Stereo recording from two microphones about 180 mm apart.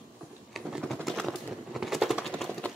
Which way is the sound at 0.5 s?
Centre (ahead or behind).